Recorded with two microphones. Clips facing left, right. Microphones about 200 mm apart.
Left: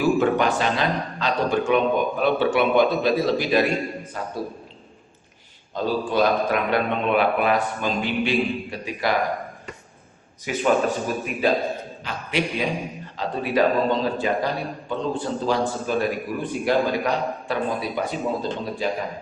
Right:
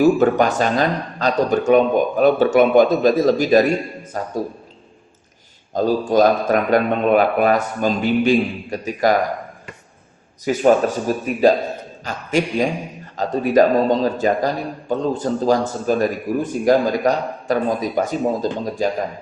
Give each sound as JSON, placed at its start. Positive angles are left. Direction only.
{"t": 0.0, "sound": "a man's voice", "side_deg": -45}
{"t": 5.7, "sound": "a man's voice", "side_deg": -45}
{"t": 10.4, "sound": "a man's voice", "side_deg": -40}